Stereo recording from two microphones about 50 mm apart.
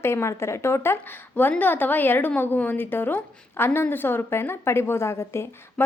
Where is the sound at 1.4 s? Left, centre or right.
Left.